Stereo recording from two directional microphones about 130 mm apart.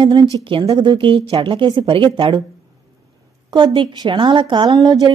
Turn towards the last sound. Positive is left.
turn(degrees=-35)  # may be behind; listen again after turning